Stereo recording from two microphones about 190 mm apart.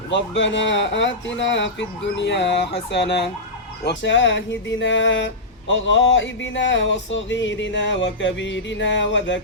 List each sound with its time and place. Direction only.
0.1 s speech: 70° left (ahead or behind)
2.9 s ambulance: 65° left (ahead or behind)
3.8 s speech: 70° left (ahead or behind)